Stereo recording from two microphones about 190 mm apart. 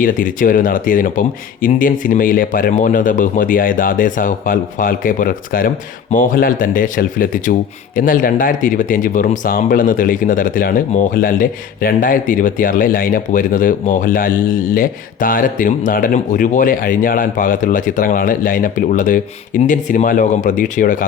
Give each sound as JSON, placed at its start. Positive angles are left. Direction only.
{"t": 0.0, "sound": "speech", "side_deg": 45}